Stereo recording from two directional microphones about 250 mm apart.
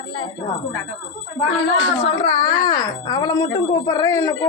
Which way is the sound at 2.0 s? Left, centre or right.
Left.